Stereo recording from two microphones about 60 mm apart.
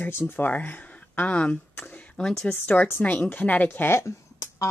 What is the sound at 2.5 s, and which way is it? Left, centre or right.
Speech, left.